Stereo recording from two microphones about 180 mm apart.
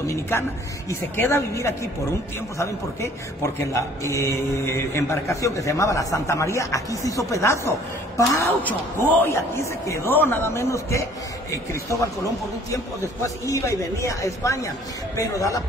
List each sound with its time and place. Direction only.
0.0 s a man's voice: 15° left (ahead or behind)
13.2 s a man's voice: 15° left (ahead or behind)